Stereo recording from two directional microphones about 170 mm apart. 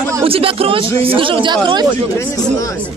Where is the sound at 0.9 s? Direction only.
30° right (ahead or behind).